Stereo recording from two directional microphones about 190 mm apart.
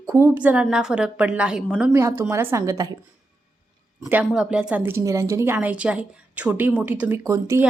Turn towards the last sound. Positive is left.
turn(degrees=-15)  # may be behind; listen again after turning